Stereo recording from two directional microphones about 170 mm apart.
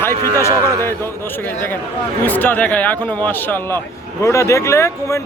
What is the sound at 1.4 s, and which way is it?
Speech, 10° left (ahead or behind).